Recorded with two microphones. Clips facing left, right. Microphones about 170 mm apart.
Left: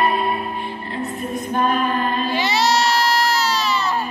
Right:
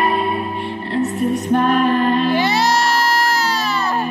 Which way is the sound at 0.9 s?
75° right (ahead or behind).